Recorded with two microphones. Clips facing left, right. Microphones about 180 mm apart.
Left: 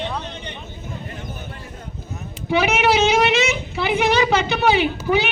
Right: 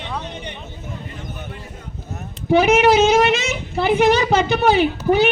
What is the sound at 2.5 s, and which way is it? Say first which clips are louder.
A woman's voice: right 5 dB; 45° right (ahead or behind).